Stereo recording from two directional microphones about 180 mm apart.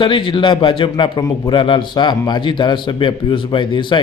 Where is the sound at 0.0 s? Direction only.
25° left (ahead or behind).